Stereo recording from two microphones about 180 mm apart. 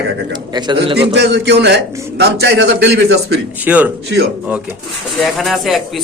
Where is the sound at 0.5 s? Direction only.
25° right (ahead or behind).